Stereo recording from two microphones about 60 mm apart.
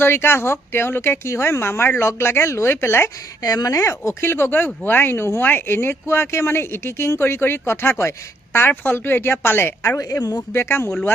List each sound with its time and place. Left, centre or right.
0.0 s speech: left
3.4 s speech: left
5.4 s speech: left